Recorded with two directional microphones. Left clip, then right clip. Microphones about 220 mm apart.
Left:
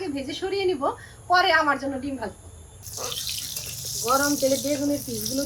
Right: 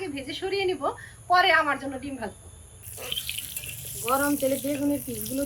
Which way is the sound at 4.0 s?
20° right (ahead or behind).